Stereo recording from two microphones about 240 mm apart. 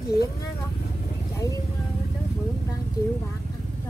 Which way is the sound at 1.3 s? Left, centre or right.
Centre.